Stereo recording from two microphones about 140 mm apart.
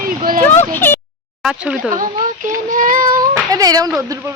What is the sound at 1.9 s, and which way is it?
A woman's voice, 70° right (ahead or behind).